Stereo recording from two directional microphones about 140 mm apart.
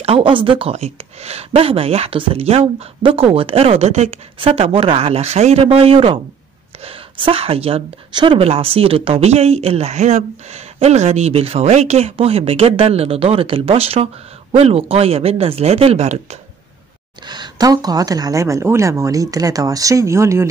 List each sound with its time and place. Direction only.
0.0 s speech: 40° right (ahead or behind)
17.3 s speech: 30° right (ahead or behind)